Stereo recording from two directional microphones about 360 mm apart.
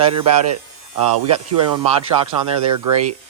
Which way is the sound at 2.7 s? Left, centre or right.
Right.